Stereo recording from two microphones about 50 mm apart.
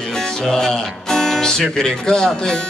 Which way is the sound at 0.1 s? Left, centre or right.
Centre.